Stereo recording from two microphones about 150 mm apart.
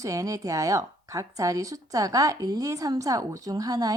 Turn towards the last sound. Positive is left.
turn(degrees=-25)  # may be behind; listen again after turning